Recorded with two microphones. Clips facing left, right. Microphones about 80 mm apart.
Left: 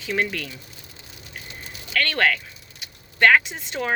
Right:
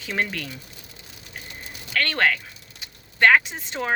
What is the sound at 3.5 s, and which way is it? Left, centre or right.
Speech, right.